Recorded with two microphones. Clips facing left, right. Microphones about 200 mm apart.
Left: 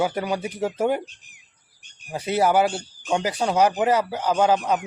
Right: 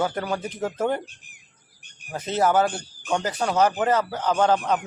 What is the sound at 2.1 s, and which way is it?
Speech, 10° left (ahead or behind).